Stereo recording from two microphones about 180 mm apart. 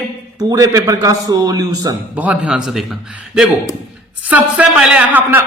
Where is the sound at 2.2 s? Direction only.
5° right (ahead or behind).